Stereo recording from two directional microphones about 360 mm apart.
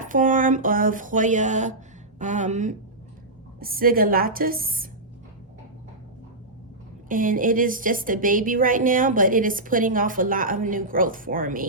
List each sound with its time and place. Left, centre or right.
0.0 s a woman's voice: right
7.1 s a woman's voice: right